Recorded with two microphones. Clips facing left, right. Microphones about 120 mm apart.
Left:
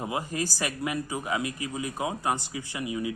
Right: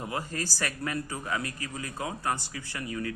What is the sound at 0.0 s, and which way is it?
A man's voice, 15° left (ahead or behind).